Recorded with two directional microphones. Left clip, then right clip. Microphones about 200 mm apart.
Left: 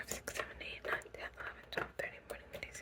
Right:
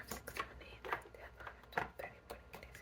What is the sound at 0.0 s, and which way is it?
Whispering, 40° left (ahead or behind).